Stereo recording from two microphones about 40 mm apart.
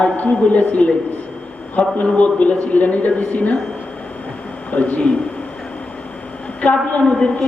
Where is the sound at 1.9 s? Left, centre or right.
Left.